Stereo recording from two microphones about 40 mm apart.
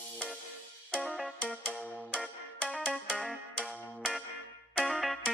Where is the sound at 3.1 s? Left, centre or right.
Centre.